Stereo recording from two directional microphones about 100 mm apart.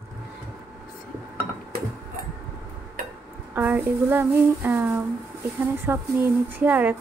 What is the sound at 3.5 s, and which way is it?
A woman's voice, 20° right (ahead or behind).